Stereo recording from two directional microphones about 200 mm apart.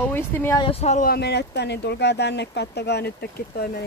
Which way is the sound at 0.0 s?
10° left (ahead or behind).